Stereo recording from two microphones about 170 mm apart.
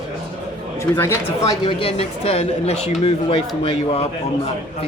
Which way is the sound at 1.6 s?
35° left (ahead or behind).